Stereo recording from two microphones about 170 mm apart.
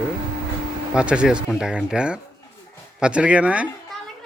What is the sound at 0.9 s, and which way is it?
A child's voice, 5° right (ahead or behind).